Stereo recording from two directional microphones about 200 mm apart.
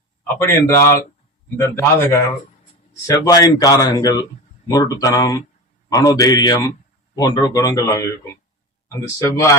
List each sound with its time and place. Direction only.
0.3 s speech: 15° left (ahead or behind)
3.2 s a man's voice: 20° left (ahead or behind)
9.1 s speech: 15° left (ahead or behind)